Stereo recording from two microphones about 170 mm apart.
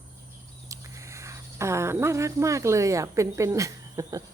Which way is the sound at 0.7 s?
15° right (ahead or behind).